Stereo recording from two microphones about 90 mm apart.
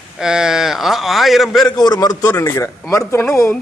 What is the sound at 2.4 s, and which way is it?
Speech, 35° left (ahead or behind).